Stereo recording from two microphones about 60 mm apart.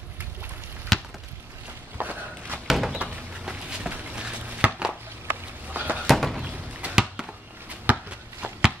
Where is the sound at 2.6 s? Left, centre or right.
Centre.